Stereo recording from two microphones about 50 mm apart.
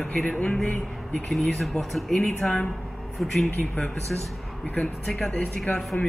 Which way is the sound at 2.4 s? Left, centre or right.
Left.